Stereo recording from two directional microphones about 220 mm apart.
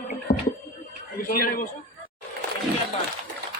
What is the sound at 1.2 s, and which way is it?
Speech, 40° left (ahead or behind).